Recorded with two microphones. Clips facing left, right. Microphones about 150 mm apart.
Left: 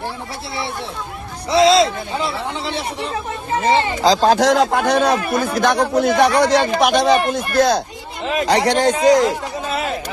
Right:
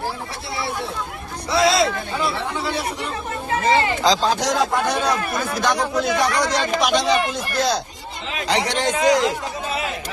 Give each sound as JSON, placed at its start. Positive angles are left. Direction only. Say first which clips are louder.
{"t": 1.5, "sound": "speech", "louder": "left 5 dB", "side_deg": 30}
{"t": 4.2, "sound": "speech", "louder": "left 6 dB", "side_deg": 65}
{"t": 8.9, "sound": "speech", "louder": "left 3 dB", "side_deg": 35}